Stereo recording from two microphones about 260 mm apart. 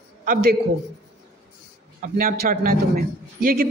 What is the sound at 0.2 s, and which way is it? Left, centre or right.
Speech, right.